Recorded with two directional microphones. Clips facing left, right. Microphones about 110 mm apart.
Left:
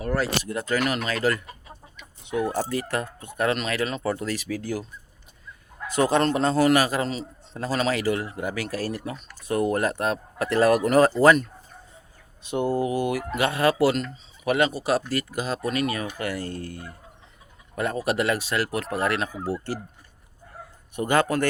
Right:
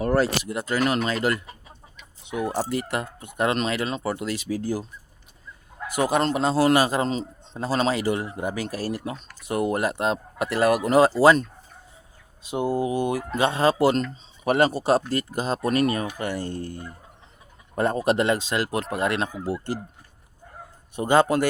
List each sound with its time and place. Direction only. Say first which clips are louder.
0.0 s a sound: right 5 dB; 30° right (ahead or behind)
0.4 s speech: right 1 dB; 15° right (ahead or behind)
2.6 s speech: even; 15° right (ahead or behind)
4.0 s speech: even; 15° right (ahead or behind); by 4.9 s 30° right (ahead or behind)
5.9 s speech: left 1 dB; 15° right (ahead or behind)
6.7 s speech: right 1 dB; 25° right (ahead or behind)
12.5 s speech: even; 15° right (ahead or behind)
13.9 s speech: right 3 dB; 35° right (ahead or behind)
18.0 s speech: right 1 dB; 30° right (ahead or behind)
20.9 s speech: right 3 dB; 20° right (ahead or behind)